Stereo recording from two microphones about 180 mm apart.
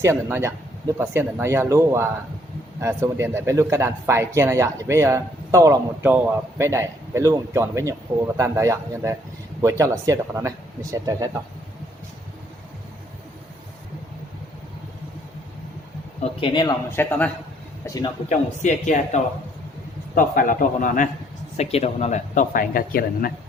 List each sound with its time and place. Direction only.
0.0 s speech: 15° right (ahead or behind)
16.2 s a man's voice: 30° left (ahead or behind)
16.9 s a man's voice: 10° left (ahead or behind)
17.8 s a man's voice: 20° left (ahead or behind)
18.3 s speech: 40° left (ahead or behind)
21.6 s speech: 35° left (ahead or behind); by 23.3 s 55° left (ahead or behind)